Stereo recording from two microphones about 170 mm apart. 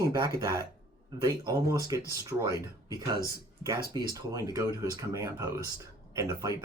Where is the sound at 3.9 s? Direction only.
20° right (ahead or behind).